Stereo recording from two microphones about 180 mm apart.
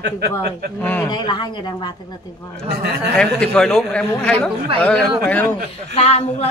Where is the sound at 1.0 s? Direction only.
25° left (ahead or behind).